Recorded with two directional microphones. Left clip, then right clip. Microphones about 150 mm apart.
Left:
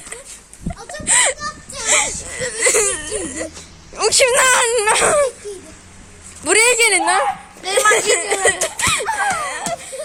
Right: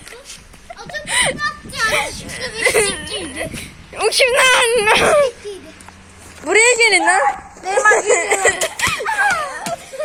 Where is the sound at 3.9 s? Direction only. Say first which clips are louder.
Right 1 dB; 5° left (ahead or behind).